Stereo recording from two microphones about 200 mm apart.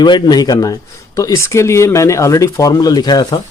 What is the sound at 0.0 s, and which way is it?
A man's voice, 20° left (ahead or behind).